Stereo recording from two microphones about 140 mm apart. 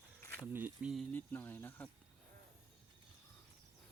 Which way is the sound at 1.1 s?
15° left (ahead or behind).